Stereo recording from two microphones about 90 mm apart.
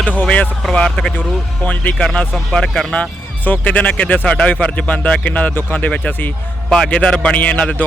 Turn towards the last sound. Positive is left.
turn(degrees=15)  # may be behind; listen again after turning